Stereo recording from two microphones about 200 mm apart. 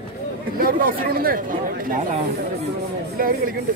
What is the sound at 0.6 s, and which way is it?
Speech, 45° right (ahead or behind).